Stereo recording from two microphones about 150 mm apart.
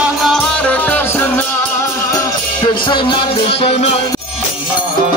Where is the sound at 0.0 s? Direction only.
Centre (ahead or behind); by 4.0 s 45° left (ahead or behind).